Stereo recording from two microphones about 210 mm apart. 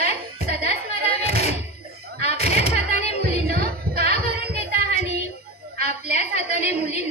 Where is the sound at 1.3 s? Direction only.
30° left (ahead or behind).